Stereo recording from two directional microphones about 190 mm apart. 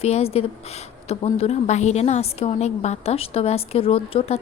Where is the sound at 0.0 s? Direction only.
30° left (ahead or behind).